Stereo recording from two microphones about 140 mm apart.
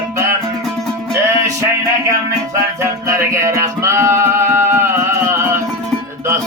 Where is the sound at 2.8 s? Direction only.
20° right (ahead or behind).